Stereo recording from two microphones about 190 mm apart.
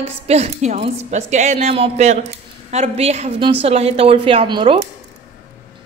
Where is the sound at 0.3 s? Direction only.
35° right (ahead or behind).